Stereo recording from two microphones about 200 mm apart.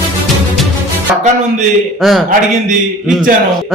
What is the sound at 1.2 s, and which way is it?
Speech, 35° right (ahead or behind).